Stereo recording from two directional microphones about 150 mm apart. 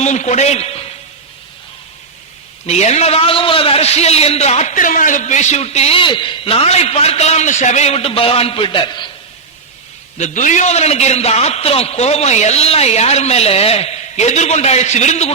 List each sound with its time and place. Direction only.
0.0 s a man's voice: 50° left (ahead or behind)
2.6 s a man's voice: 45° left (ahead or behind)
10.2 s a man's voice: 55° left (ahead or behind)